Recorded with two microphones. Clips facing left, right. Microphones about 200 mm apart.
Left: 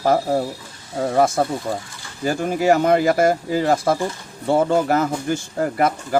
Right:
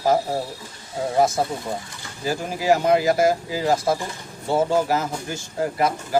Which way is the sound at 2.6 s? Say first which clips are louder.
Left 2 dB; 55° left (ahead or behind).